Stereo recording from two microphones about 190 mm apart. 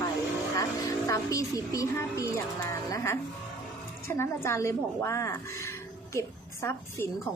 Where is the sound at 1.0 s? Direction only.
15° left (ahead or behind).